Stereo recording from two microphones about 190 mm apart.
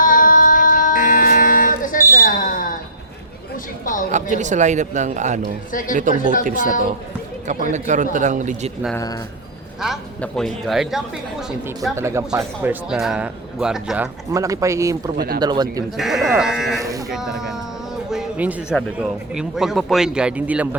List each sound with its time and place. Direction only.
0.0 s music: 45° left (ahead or behind)
2.1 s smoke detector: 45° left (ahead or behind)
4.1 s speech: 40° right (ahead or behind)
9.8 s a woman's voice: centre (ahead or behind)
11.9 s speech: 15° right (ahead or behind)
12.9 s a woman's voice: 5° right (ahead or behind)
14.3 s speech: 15° right (ahead or behind)
16.0 s a woman's voice: centre (ahead or behind)
17.1 s a sound: centre (ahead or behind)
18.8 s a woman's voice: 5° right (ahead or behind)